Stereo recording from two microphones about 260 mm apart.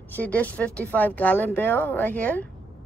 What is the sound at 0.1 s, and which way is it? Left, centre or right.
Speech, centre.